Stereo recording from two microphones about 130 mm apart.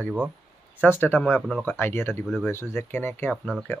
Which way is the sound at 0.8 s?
15° left (ahead or behind).